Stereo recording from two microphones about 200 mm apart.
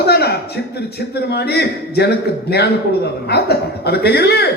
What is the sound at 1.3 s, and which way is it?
A man's voice, 55° left (ahead or behind).